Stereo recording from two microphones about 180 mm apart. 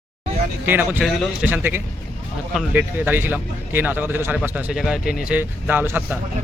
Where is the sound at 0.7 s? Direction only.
10° right (ahead or behind).